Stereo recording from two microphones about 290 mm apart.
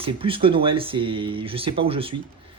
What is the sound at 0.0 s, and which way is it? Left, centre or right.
Speech, centre.